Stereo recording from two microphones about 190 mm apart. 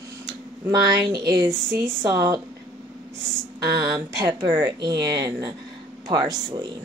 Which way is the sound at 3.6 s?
20° right (ahead or behind).